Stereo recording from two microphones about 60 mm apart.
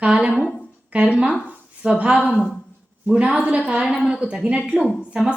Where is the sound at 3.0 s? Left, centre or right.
Right.